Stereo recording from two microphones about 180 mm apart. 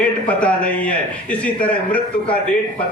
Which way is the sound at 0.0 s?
5° left (ahead or behind).